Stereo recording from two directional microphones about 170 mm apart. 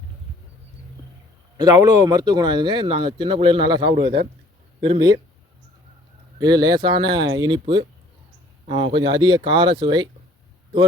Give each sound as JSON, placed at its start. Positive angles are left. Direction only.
{"t": 1.5, "sound": "speech", "side_deg": -20}
{"t": 6.4, "sound": "speech", "side_deg": -25}